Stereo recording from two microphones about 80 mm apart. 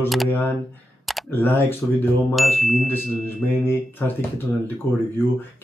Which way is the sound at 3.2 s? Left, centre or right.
Left.